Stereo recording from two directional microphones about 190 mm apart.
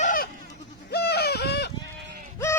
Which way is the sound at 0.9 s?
60° left (ahead or behind).